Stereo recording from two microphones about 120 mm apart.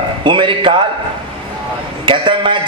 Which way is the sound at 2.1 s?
45° right (ahead or behind).